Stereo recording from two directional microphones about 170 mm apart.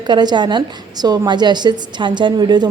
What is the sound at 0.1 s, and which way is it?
A woman's voice, 25° right (ahead or behind).